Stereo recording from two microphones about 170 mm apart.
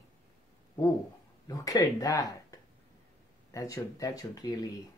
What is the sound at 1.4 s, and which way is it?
Speech, 20° left (ahead or behind).